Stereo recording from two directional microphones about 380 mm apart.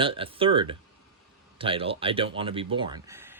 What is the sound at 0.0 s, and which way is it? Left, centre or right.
Speech, centre.